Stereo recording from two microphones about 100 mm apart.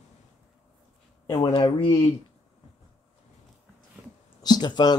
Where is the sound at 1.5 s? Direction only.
60° left (ahead or behind).